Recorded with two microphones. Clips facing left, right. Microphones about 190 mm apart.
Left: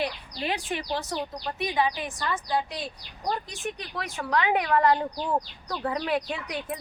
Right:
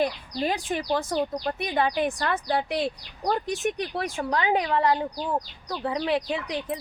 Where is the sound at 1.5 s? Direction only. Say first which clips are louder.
Right 1 dB; 55° right (ahead or behind).